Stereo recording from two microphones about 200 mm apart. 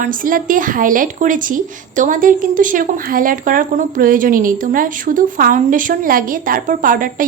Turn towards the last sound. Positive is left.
turn(degrees=-45)  # may be behind; listen again after turning